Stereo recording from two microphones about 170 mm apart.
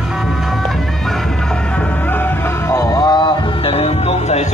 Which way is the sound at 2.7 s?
25° left (ahead or behind).